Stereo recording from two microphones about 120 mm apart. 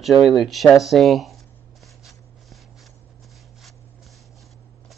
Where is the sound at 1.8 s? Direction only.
Centre (ahead or behind).